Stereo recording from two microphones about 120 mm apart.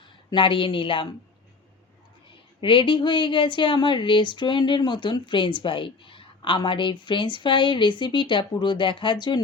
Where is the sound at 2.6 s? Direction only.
45° left (ahead or behind).